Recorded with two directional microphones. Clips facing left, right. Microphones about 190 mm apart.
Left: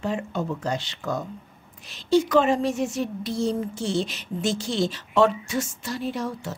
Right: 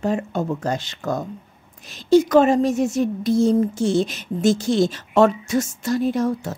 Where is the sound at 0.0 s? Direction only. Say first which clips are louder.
Right 5 dB; 45° right (ahead or behind).